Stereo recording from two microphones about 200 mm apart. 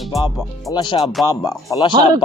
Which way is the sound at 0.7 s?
20° left (ahead or behind).